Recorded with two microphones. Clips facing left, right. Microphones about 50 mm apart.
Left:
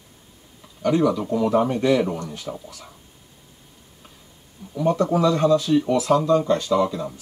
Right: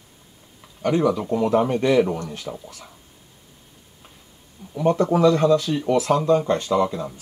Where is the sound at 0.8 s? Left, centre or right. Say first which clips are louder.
Even; right.